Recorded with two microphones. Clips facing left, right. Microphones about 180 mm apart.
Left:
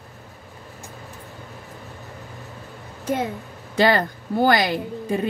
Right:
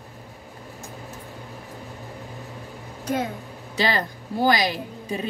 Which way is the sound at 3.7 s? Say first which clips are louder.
Left 6 dB; 55° left (ahead or behind).